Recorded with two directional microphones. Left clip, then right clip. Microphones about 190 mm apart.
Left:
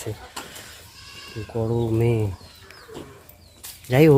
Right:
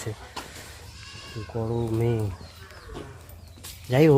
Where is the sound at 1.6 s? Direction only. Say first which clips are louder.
Left 4 dB; 25° left (ahead or behind).